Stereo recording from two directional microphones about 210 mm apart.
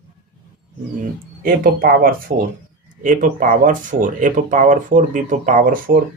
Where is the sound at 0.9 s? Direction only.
40° right (ahead or behind).